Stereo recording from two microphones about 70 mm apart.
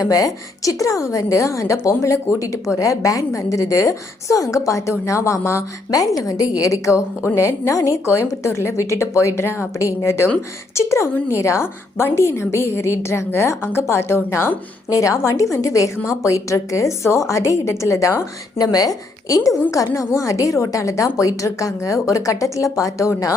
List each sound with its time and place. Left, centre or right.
0.0 s a woman's voice: left
5.9 s a woman's voice: left
6.6 s a woman's voice: left
14.8 s a woman's voice: left
18.6 s a woman's voice: left